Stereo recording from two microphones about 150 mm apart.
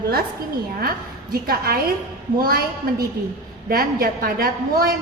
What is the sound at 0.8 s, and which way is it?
A woman's voice, 85° right.